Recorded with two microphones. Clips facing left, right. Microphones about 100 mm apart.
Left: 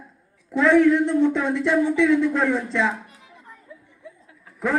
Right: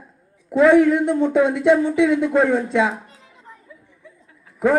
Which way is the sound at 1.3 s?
55° right (ahead or behind).